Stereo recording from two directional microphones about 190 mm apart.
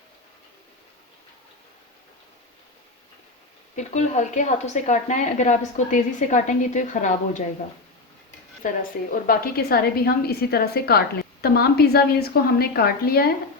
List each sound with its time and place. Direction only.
3.8 s a woman's voice: 40° left (ahead or behind)
8.6 s a woman's voice: 45° left (ahead or behind)